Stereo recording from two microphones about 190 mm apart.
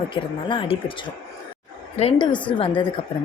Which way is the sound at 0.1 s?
25° left (ahead or behind).